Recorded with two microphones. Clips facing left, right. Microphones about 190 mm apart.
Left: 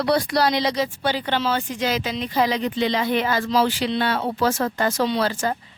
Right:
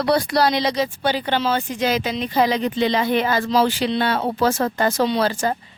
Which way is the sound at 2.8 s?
50° right (ahead or behind).